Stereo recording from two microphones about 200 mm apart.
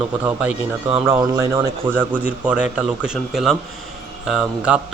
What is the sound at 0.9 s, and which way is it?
Speech, 10° right (ahead or behind).